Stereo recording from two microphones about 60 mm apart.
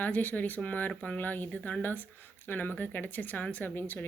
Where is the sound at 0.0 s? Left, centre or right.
Left.